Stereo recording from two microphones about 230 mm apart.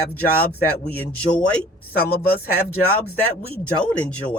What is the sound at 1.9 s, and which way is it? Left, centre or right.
Speech, left.